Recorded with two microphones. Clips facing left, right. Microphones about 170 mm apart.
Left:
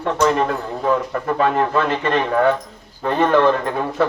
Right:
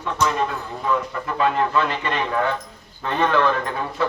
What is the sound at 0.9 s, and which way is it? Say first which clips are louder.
Speech: left 5 dB; 45° left (ahead or behind).